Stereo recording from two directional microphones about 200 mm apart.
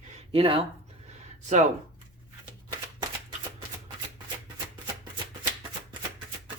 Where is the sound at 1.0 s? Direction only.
35° right (ahead or behind).